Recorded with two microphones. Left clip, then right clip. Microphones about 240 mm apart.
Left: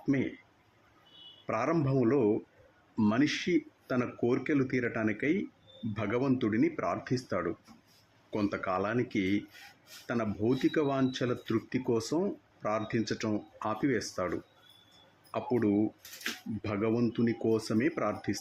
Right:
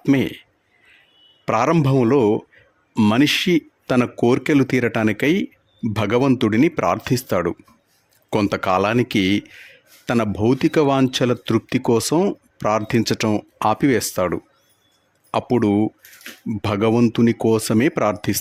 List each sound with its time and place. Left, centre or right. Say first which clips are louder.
0.0 s speech: right 13 dB; right
1.5 s speech: right 13 dB; right